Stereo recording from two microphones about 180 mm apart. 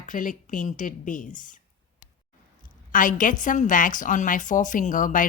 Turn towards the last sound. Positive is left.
turn(degrees=45)  # may be behind; listen again after turning